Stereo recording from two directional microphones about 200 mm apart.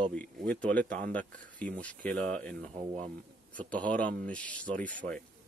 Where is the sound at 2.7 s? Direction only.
25° right (ahead or behind).